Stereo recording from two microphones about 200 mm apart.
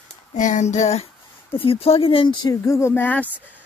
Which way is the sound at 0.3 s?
35° left (ahead or behind).